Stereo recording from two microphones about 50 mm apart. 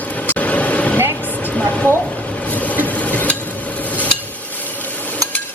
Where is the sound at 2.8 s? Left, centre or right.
Left.